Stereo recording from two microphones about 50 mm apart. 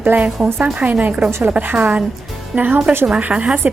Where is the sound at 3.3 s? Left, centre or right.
Right.